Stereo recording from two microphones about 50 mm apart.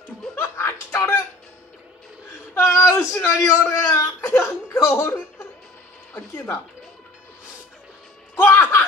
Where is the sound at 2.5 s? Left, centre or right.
Left.